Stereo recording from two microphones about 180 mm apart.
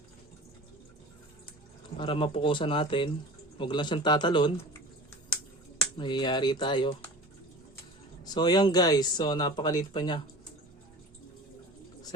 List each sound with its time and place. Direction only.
2.0 s speech: 30° left (ahead or behind)
6.0 s speech: 25° left (ahead or behind)
8.2 s speech: 20° left (ahead or behind)